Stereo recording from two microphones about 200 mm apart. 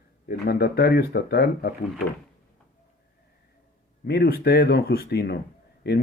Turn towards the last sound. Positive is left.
turn(degrees=50)  # may be behind; listen again after turning